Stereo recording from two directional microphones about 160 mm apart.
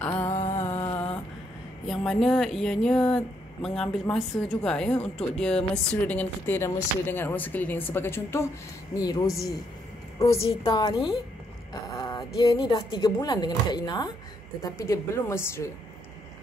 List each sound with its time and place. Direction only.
0.3 s music: 45° left (ahead or behind)
0.7 s music: 25° left (ahead or behind)
1.9 s speech: centre (ahead or behind); by 10.5 s 20° left (ahead or behind)
10.6 s a woman's voice: 30° left (ahead or behind)
12.0 s music: 25° left (ahead or behind)
12.4 s speech: 25° left (ahead or behind)